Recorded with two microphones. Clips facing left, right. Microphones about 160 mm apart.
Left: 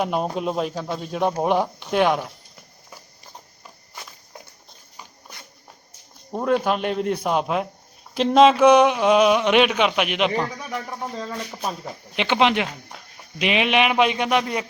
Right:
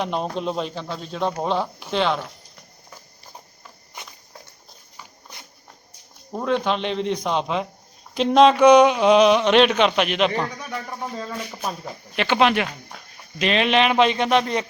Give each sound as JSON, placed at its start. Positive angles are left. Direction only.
{"t": 0.0, "sound": "speech", "side_deg": 5}
{"t": 6.3, "sound": "speech", "side_deg": 10}
{"t": 12.1, "sound": "speech", "side_deg": 15}